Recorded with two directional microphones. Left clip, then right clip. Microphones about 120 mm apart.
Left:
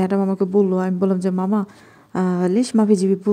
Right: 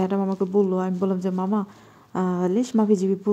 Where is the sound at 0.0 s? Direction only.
25° left (ahead or behind).